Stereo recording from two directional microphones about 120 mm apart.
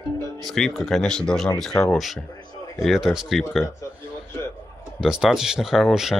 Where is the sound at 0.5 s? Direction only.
Centre (ahead or behind).